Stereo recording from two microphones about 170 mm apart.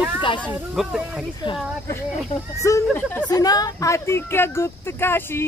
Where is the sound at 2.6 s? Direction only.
15° left (ahead or behind).